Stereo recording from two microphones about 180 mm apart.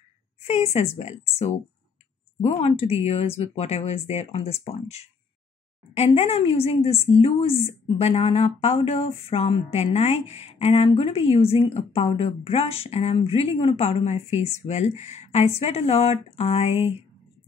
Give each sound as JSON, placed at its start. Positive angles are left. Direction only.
{"t": 0.4, "sound": "a woman's voice", "side_deg": 35}